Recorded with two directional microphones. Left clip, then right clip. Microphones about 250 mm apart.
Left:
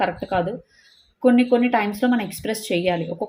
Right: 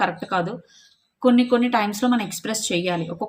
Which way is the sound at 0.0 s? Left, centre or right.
Centre.